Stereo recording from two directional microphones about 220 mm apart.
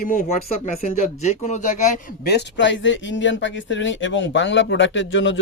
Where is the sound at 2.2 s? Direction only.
50° left (ahead or behind).